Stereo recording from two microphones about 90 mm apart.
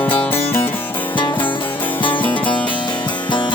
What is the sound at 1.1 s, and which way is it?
Music, 65° left (ahead or behind).